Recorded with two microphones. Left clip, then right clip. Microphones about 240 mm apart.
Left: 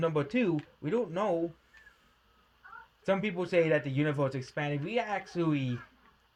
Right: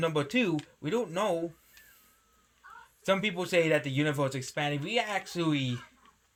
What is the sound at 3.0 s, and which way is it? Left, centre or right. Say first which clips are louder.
Speech: right 2 dB; centre.